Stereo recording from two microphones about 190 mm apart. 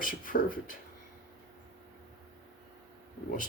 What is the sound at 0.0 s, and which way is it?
Speech, 45° left (ahead or behind).